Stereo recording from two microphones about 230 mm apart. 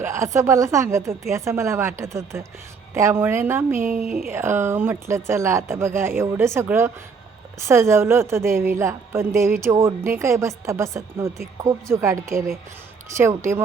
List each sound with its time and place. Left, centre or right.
0.0 s a woman's voice: centre
3.8 s speech: right
4.3 s a woman's voice: centre